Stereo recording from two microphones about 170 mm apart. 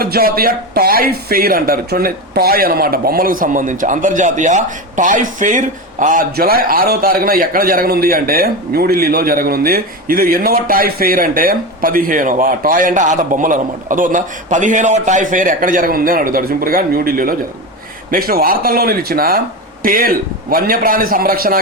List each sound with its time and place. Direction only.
0.0 s speech: 60° right (ahead or behind)